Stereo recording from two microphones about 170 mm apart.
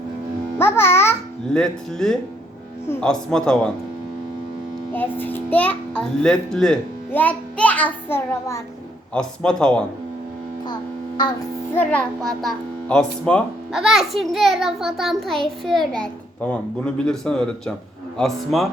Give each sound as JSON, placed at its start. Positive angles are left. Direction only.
{"t": 0.6, "sound": "a child's voice", "side_deg": 15}
{"t": 1.5, "sound": "a child's voice", "side_deg": 5}
{"t": 4.9, "sound": "a child's voice", "side_deg": 10}
{"t": 9.1, "sound": "a child's voice", "side_deg": 5}
{"t": 11.7, "sound": "a child's voice", "side_deg": 10}